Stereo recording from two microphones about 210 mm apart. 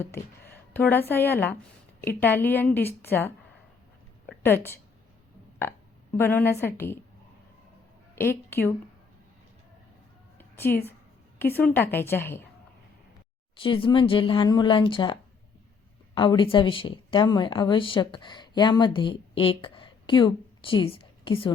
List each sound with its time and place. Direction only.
0.0 s a sound: 10° left (ahead or behind)
0.9 s a woman's voice: 10° left (ahead or behind)
6.1 s a woman's voice: 10° left (ahead or behind)
8.1 s a woman's voice: 10° left (ahead or behind)
10.3 s a sound: 10° left (ahead or behind)
11.5 s a woman's voice: 10° left (ahead or behind)
13.6 s speech: 25° left (ahead or behind)